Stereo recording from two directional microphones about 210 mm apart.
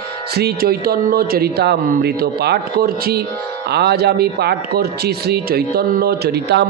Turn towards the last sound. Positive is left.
turn(degrees=-55)  # may be behind; listen again after turning